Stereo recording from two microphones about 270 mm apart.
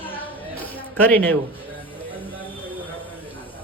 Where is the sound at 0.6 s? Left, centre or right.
Centre.